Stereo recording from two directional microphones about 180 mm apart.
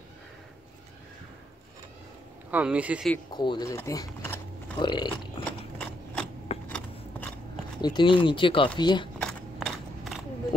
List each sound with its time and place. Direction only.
2.5 s speech: 5° right (ahead or behind)
3.3 s biting: 25° left (ahead or behind)
6.7 s biting: 5° left (ahead or behind)
7.8 s speech: 25° left (ahead or behind)
9.2 s a sound: centre (ahead or behind)